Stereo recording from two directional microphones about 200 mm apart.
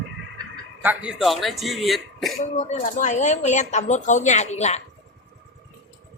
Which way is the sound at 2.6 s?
35° left (ahead or behind).